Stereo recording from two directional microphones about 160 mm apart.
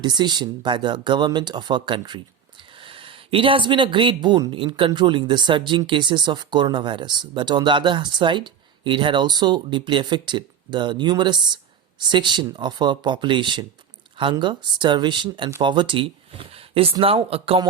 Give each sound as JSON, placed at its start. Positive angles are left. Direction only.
{"t": 0.0, "sound": "speech", "side_deg": -25}